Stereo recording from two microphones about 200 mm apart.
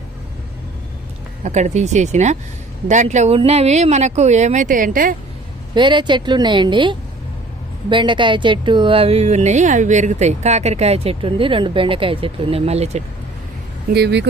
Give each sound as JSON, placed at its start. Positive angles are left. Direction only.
{"t": 1.5, "sound": "speech", "side_deg": -35}
{"t": 5.7, "sound": "a woman's voice", "side_deg": -25}
{"t": 13.9, "sound": "speech", "side_deg": -55}